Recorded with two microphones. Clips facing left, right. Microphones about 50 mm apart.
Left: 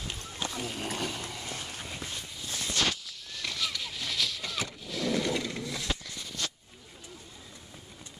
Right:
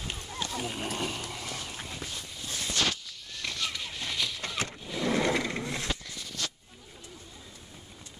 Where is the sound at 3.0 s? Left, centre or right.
Centre.